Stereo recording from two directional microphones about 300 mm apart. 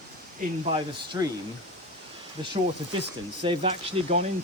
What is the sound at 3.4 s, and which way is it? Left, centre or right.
Speech, centre.